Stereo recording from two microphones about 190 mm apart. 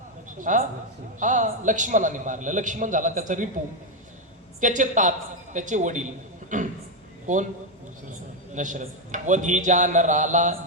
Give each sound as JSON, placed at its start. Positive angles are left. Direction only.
{"t": 0.3, "sound": "a man's voice", "side_deg": -40}
{"t": 4.6, "sound": "a man's voice", "side_deg": -40}
{"t": 8.5, "sound": "a man's voice", "side_deg": -40}